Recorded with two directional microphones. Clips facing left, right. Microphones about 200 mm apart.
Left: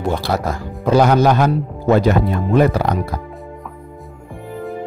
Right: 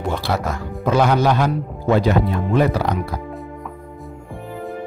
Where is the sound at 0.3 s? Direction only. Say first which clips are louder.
Left 2 dB; 40° left (ahead or behind).